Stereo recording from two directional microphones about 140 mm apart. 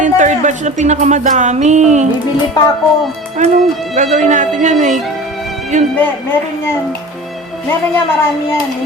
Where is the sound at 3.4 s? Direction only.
60° right (ahead or behind).